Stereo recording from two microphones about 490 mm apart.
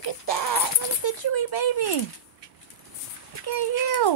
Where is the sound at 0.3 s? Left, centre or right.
Left.